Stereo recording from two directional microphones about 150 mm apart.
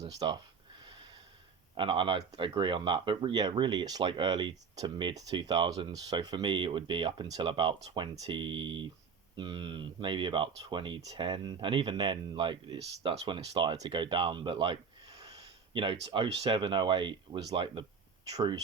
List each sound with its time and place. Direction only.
0.2 s speech: 35° right (ahead or behind)
1.7 s speech: 35° right (ahead or behind)